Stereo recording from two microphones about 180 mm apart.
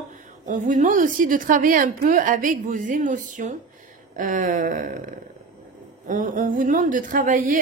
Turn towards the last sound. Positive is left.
turn(degrees=-45)  # may be behind; listen again after turning